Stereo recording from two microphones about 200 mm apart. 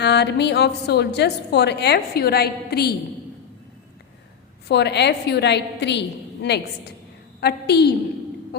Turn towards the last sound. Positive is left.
turn(degrees=55)  # may be behind; listen again after turning